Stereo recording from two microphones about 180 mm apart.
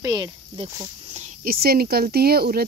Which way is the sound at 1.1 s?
50° right (ahead or behind).